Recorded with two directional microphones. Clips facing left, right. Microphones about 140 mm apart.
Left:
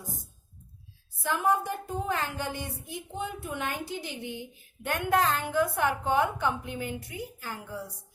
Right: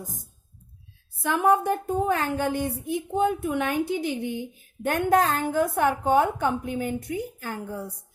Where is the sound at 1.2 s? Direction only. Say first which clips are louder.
Right 6 dB; 60° right (ahead or behind).